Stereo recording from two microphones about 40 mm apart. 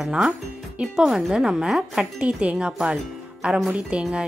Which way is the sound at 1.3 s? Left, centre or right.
Centre.